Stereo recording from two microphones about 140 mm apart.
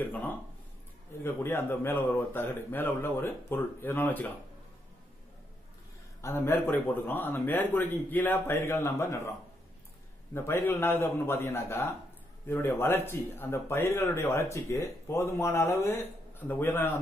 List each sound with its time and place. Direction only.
0.0 s a man's voice: 15° left (ahead or behind)
6.2 s a man's voice: 15° left (ahead or behind)
10.3 s a man's voice: 15° left (ahead or behind)